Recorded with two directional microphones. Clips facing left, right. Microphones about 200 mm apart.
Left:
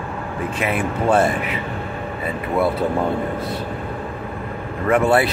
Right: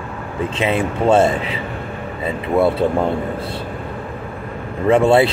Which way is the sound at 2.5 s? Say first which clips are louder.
Right 4 dB; 25° right (ahead or behind).